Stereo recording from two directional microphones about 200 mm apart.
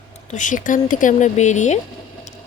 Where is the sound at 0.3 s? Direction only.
40° left (ahead or behind).